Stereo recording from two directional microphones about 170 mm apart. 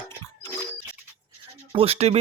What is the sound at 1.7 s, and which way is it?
Speech, 35° right (ahead or behind).